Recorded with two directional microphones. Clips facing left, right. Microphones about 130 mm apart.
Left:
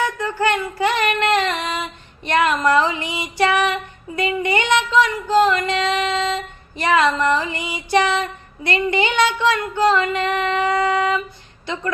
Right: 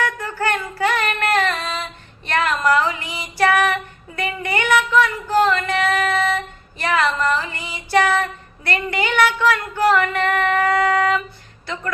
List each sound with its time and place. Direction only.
0.0 s female singing: 20° left (ahead or behind)
5.5 s music: 20° left (ahead or behind)
6.7 s a sound: 20° left (ahead or behind)